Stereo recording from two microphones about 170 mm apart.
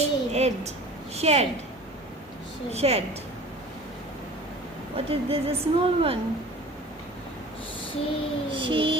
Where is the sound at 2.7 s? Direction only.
35° right (ahead or behind).